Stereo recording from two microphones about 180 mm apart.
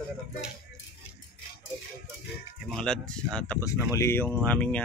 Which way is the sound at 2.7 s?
5° left (ahead or behind).